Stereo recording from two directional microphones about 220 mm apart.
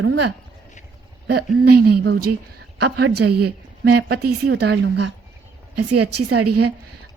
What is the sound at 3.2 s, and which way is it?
Speech, 90° right.